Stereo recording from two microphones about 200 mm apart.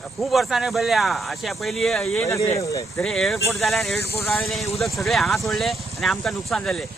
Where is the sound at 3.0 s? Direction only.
Centre (ahead or behind).